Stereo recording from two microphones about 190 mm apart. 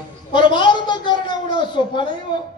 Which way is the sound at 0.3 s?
25° left (ahead or behind).